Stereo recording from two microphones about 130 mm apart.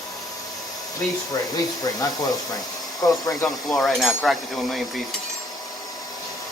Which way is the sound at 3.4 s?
Centre (ahead or behind).